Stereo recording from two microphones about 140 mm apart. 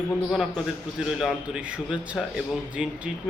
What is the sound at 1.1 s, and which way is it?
Music, centre (ahead or behind).